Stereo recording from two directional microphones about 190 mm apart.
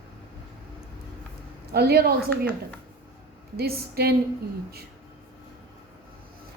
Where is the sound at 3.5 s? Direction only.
55° right (ahead or behind).